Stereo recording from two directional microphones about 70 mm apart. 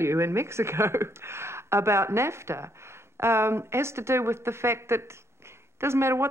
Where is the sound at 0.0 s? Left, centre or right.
Right.